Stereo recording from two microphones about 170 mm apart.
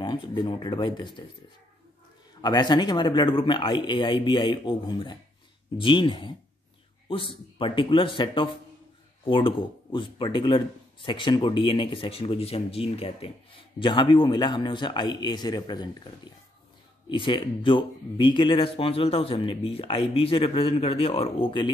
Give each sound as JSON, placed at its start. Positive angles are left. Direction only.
{"t": 0.0, "sound": "speech", "side_deg": 25}
{"t": 2.4, "sound": "speech", "side_deg": 25}
{"t": 17.1, "sound": "speech", "side_deg": 30}